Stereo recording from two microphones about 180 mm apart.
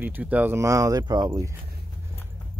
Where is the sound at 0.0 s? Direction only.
10° right (ahead or behind).